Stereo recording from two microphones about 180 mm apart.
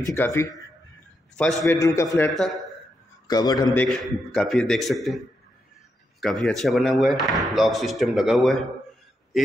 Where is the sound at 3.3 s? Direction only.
20° left (ahead or behind).